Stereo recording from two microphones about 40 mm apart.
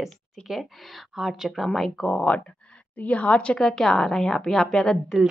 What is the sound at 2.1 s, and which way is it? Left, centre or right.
A woman's voice, left.